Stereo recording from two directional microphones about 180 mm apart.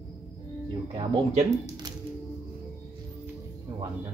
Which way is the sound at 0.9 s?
40° right (ahead or behind).